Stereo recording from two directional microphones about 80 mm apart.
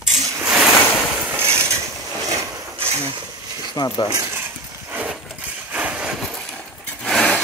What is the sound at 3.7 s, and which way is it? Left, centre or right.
Speech, left.